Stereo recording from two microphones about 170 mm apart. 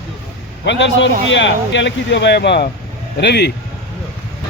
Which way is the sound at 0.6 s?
90° left.